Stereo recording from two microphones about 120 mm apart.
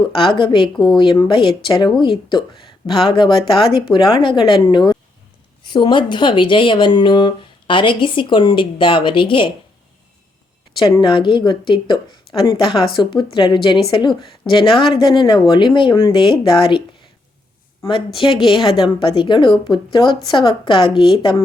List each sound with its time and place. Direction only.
0.1 s a woman's voice: 45° left (ahead or behind)
11.0 s a woman's voice: 40° left (ahead or behind)